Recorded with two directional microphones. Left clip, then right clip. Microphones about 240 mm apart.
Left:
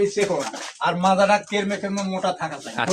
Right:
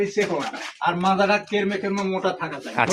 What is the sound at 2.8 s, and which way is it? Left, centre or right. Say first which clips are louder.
Speech: right 2 dB; centre.